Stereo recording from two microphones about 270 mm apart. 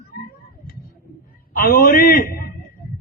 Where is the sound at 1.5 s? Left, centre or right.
Left.